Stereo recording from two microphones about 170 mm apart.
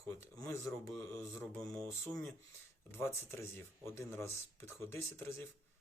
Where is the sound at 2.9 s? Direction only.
15° left (ahead or behind).